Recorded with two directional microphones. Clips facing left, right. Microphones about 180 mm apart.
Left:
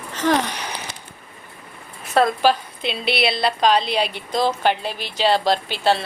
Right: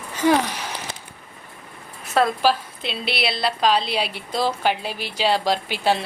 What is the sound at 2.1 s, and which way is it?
A woman's voice, centre (ahead or behind).